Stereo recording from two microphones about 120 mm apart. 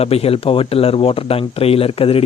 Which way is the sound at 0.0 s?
55° left (ahead or behind).